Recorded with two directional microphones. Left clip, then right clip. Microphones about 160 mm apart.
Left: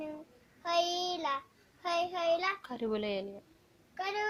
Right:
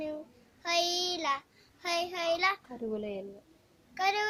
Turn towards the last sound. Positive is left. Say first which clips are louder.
# right 6 dB
turn(degrees=-30)  # may be behind; listen again after turning